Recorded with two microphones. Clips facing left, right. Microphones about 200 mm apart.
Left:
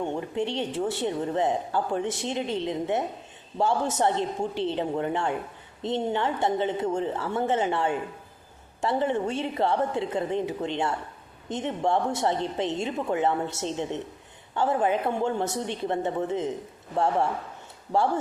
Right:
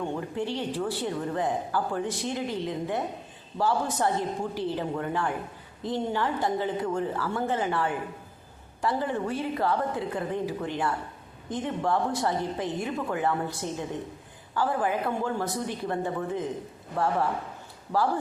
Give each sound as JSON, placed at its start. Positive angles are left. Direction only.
{"t": 0.0, "sound": "a woman's voice", "side_deg": 20}